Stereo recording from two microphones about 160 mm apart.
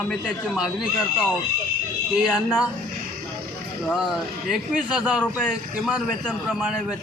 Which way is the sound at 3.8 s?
Centre (ahead or behind).